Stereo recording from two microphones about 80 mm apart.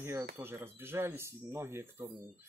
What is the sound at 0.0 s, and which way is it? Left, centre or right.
Speech, right.